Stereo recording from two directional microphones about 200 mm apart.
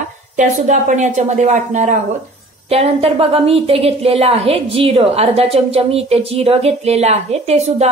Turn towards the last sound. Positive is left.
turn(degrees=-30)  # may be behind; listen again after turning